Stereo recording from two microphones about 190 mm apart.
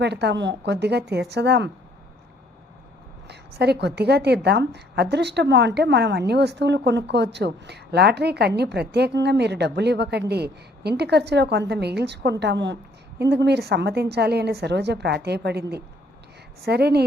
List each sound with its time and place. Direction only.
0.0 s a woman's voice: 60° right (ahead or behind)
3.2 s a woman's voice: 60° right (ahead or behind)